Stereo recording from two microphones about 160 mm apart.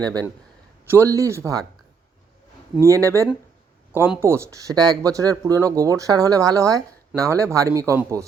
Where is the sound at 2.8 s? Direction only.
20° right (ahead or behind).